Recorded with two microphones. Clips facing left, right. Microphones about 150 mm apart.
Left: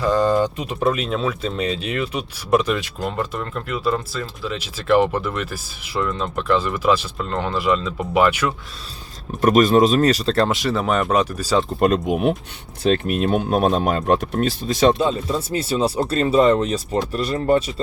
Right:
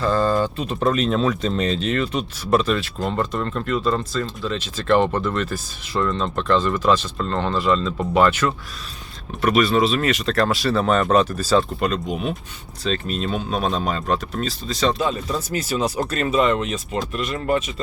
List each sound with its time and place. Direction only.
0.0 s speech: 15° left (ahead or behind)
9.4 s speech: 45° left (ahead or behind); by 11.6 s 10° left (ahead or behind)
11.8 s speech: 55° left (ahead or behind)
14.9 s speech: 25° left (ahead or behind)